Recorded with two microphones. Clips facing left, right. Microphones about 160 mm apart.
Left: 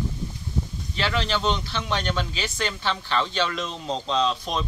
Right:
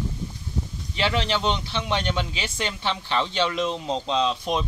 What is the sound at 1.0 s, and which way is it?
Speech, 25° right (ahead or behind).